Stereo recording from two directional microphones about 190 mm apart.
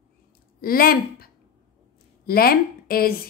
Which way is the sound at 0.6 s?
50° left (ahead or behind).